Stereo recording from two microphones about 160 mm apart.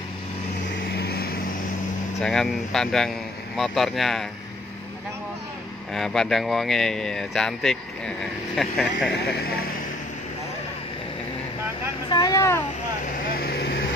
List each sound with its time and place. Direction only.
0.9 s vehicle: 80° left
2.2 s speech: 5° left (ahead or behind)
5.9 s speech: centre (ahead or behind)
12.1 s speech: 20° left (ahead or behind)
13.4 s vehicle: 80° left